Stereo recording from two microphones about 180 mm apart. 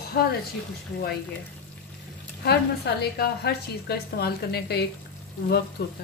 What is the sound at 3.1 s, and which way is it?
Speech, 60° left (ahead or behind).